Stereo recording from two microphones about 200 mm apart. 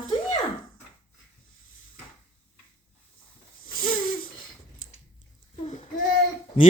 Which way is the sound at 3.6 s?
45° left (ahead or behind).